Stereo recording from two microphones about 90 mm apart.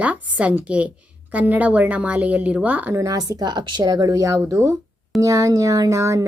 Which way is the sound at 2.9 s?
40° right (ahead or behind).